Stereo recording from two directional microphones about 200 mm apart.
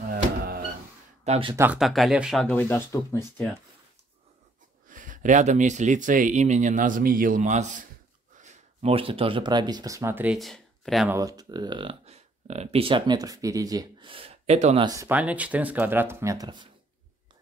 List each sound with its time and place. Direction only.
1.2 s speech: 30° right (ahead or behind)
1.5 s speech: 10° right (ahead or behind)
1.8 s speech: centre (ahead or behind)
2.6 s speech: 15° left (ahead or behind)
4.8 s speech: 40° right (ahead or behind); by 11.1 s centre (ahead or behind)
11.1 s speech: 20° right (ahead or behind)
14.9 s speech: 10° right (ahead or behind)